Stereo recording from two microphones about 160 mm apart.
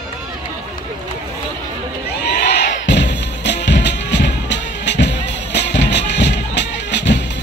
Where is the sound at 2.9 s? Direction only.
90° left.